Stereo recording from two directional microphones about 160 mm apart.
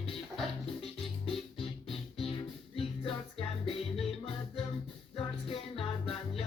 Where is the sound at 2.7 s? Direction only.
35° left (ahead or behind).